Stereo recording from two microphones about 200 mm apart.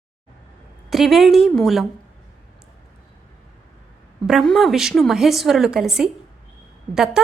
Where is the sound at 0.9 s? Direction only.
Centre (ahead or behind).